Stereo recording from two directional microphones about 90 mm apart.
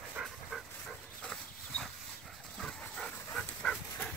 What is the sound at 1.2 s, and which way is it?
Dog, 5° left (ahead or behind).